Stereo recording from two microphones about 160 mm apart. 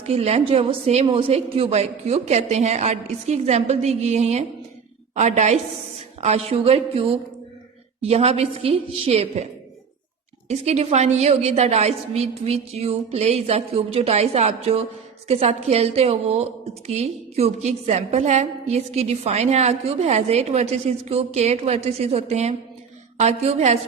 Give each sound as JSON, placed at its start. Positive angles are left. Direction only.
{"t": 0.0, "sound": "a woman's voice", "side_deg": -40}
{"t": 10.5, "sound": "a woman's voice", "side_deg": -45}